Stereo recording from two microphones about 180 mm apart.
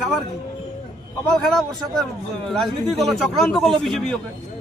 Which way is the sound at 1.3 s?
Centre (ahead or behind).